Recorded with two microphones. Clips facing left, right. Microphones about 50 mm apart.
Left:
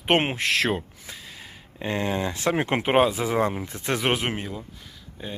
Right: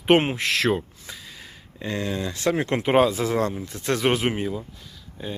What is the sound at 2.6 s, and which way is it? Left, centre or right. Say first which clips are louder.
Speech: even; left.